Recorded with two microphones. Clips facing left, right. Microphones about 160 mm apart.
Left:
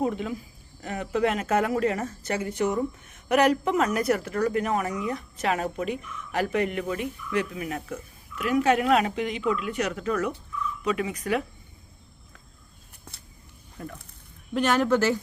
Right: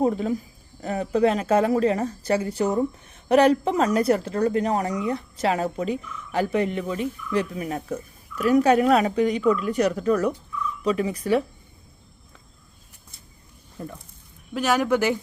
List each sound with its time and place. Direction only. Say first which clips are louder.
0.0 s speech: right 5 dB; 35° right (ahead or behind)
14.5 s speech: right 1 dB; 5° right (ahead or behind)